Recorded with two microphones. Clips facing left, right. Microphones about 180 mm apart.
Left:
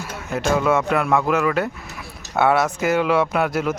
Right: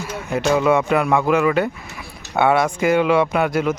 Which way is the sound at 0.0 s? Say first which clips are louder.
Right 3 dB; centre (ahead or behind).